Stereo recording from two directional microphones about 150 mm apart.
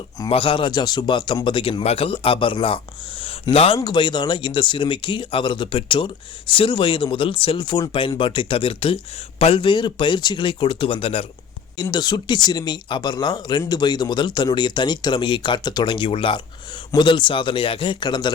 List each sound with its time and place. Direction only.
0.3 s speech: 35° left (ahead or behind)
3.8 s speech: 30° left (ahead or behind)
11.8 s speech: 30° left (ahead or behind)